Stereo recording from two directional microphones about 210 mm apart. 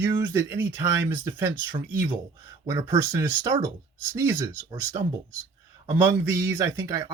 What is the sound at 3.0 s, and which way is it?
Speech, 15° right (ahead or behind).